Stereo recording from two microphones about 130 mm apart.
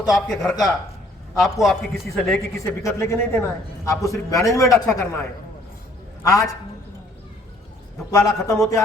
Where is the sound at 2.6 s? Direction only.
20° left (ahead or behind).